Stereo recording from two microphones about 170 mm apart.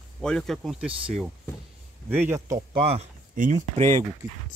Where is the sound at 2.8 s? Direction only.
35° right (ahead or behind).